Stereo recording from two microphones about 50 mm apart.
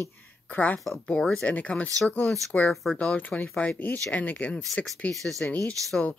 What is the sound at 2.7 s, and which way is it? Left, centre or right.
Speech, centre.